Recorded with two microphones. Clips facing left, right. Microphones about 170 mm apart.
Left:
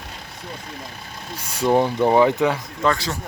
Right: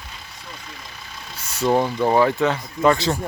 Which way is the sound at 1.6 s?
15° left (ahead or behind).